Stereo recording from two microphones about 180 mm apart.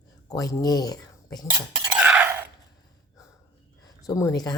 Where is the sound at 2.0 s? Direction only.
10° right (ahead or behind).